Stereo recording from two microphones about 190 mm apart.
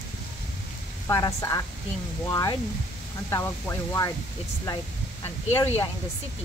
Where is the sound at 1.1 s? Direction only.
15° left (ahead or behind).